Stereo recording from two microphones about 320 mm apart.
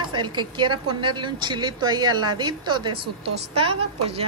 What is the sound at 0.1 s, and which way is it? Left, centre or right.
A woman's voice, centre.